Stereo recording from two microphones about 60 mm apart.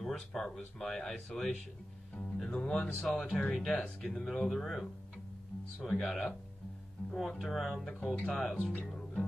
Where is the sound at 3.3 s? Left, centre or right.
Centre.